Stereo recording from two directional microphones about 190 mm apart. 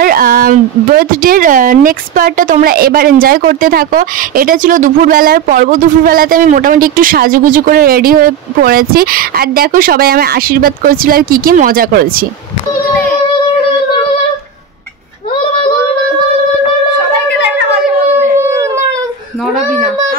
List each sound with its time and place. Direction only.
0.0 s speech: 50° right (ahead or behind)